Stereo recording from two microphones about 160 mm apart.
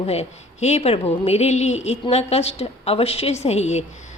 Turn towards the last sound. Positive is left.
turn(degrees=45)  # may be behind; listen again after turning